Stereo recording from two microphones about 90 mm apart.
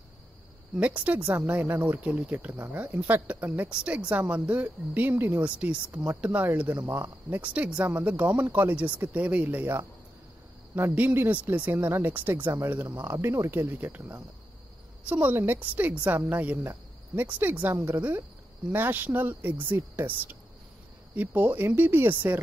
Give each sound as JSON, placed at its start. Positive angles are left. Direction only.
{"t": 0.7, "sound": "speech", "side_deg": -15}
{"t": 10.8, "sound": "speech", "side_deg": -20}